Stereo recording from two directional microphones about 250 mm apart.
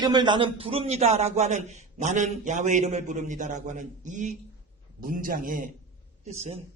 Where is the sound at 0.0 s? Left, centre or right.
Centre.